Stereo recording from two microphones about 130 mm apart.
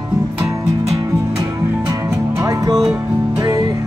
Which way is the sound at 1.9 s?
25° right (ahead or behind).